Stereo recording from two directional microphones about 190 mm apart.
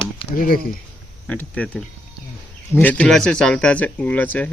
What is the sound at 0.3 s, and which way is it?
Speech, 50° left (ahead or behind).